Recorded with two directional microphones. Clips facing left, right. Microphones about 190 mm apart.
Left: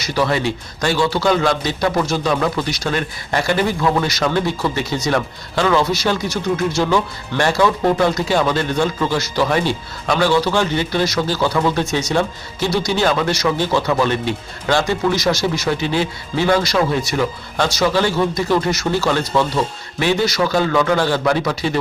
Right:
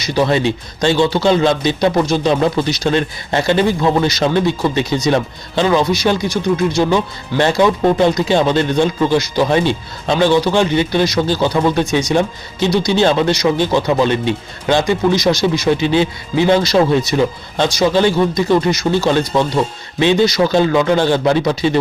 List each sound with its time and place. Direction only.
0.0 s a man's voice: 20° right (ahead or behind)